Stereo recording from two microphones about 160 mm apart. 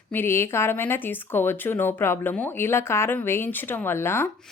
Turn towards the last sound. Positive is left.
turn(degrees=15)  # may be behind; listen again after turning